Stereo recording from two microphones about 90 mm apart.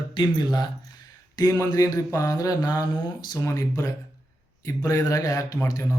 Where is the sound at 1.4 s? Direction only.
40° left (ahead or behind).